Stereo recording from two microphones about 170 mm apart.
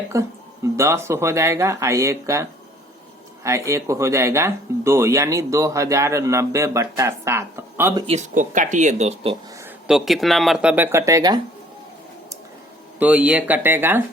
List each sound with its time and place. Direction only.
0.1 s speech: 15° right (ahead or behind)
8.0 s speech: 45° right (ahead or behind)
9.6 s speech: 5° right (ahead or behind); by 11.3 s 20° right (ahead or behind)
13.0 s speech: 10° right (ahead or behind)